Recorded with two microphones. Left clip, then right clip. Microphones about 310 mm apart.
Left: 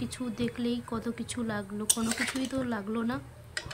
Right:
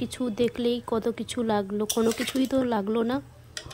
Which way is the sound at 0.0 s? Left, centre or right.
Centre.